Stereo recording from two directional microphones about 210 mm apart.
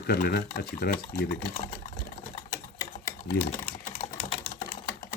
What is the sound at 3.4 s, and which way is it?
Speech, 50° left (ahead or behind).